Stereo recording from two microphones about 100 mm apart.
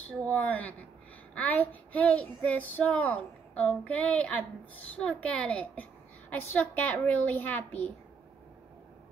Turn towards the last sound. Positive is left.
turn(degrees=15)  # may be behind; listen again after turning